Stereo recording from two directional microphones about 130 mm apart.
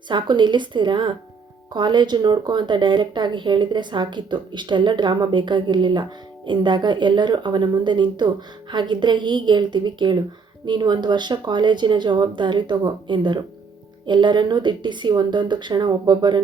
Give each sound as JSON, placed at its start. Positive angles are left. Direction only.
{"t": 0.1, "sound": "speech", "side_deg": -35}